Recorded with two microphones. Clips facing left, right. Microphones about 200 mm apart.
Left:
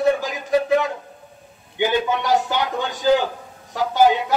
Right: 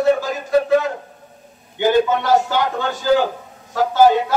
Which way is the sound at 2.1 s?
15° left (ahead or behind).